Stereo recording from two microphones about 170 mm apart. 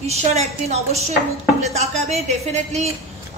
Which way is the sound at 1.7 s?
40° right (ahead or behind).